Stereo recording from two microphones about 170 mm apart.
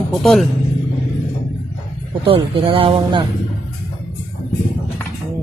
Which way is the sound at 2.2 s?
30° right (ahead or behind).